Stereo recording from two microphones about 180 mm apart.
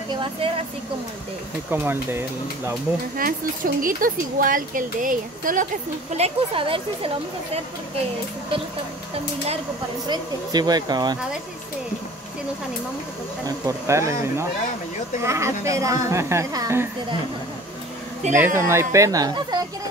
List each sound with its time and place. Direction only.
0.1 s speech: 25° right (ahead or behind)
1.7 s a woman's voice: 10° right (ahead or behind)
3.2 s speech: 50° right (ahead or behind)
6.1 s speech: 30° right (ahead or behind)
10.0 s speech: 25° right (ahead or behind)
13.7 s a woman's voice: 15° right (ahead or behind)
18.3 s a woman's voice: 15° right (ahead or behind)